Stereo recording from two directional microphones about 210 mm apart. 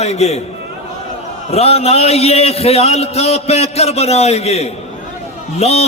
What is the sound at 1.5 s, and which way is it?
A man's voice, 30° left (ahead or behind).